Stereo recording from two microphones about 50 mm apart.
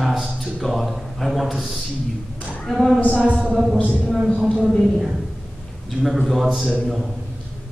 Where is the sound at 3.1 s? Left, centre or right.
Right.